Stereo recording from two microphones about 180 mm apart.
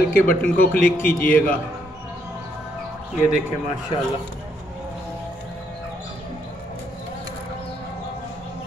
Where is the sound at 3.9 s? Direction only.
30° left (ahead or behind).